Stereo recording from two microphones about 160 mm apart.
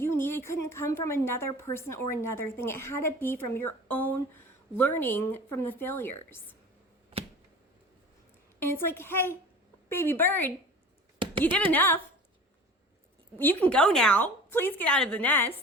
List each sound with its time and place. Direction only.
0.0 s a woman's voice: 15° left (ahead or behind)
8.5 s a woman's voice: 15° left (ahead or behind)
11.2 s a sound: 30° right (ahead or behind)
11.5 s a woman's voice: 10° left (ahead or behind)
13.4 s a woman's voice: 10° left (ahead or behind)